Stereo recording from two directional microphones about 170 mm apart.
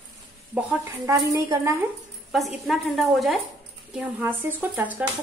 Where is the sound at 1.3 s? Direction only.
15° right (ahead or behind).